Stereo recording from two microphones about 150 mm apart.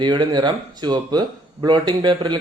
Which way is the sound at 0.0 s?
30° right (ahead or behind).